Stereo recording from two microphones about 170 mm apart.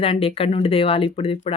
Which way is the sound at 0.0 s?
35° left (ahead or behind).